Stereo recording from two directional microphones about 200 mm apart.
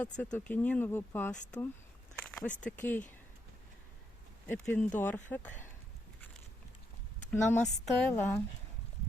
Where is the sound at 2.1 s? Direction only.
5° left (ahead or behind).